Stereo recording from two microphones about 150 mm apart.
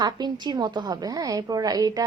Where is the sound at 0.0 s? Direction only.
30° right (ahead or behind).